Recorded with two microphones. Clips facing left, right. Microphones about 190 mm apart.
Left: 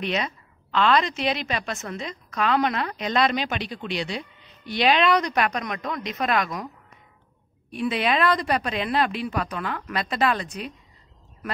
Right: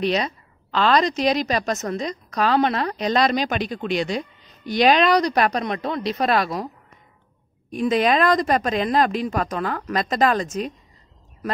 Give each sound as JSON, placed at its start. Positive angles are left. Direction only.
{"t": 0.0, "sound": "a woman's voice", "side_deg": -35}
{"t": 7.7, "sound": "speech", "side_deg": -40}